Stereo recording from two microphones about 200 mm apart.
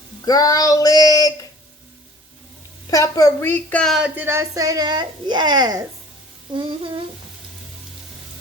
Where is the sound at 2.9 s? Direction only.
15° left (ahead or behind); by 7.0 s 25° right (ahead or behind).